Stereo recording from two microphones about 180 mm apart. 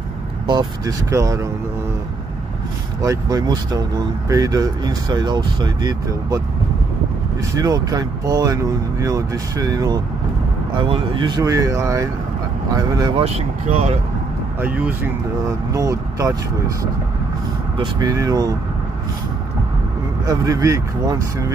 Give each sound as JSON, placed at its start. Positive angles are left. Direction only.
{"t": 0.5, "sound": "speech", "side_deg": -20}
{"t": 3.0, "sound": "speech", "side_deg": -20}
{"t": 7.5, "sound": "speech", "side_deg": -20}
{"t": 13.2, "sound": "speech", "side_deg": -35}
{"t": 14.6, "sound": "speech", "side_deg": -10}
{"t": 20.2, "sound": "speech", "side_deg": -20}